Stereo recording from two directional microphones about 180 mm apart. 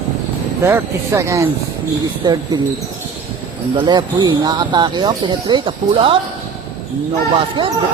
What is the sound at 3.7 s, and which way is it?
Speech, 25° right (ahead or behind).